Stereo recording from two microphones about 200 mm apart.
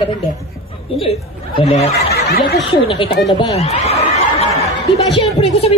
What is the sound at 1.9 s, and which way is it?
Speech, 55° left (ahead or behind).